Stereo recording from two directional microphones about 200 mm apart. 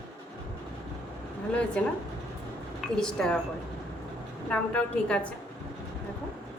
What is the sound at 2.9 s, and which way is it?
Speech, 5° left (ahead or behind).